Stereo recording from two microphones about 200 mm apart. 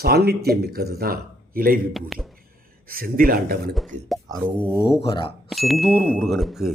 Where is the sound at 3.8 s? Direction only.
Centre (ahead or behind).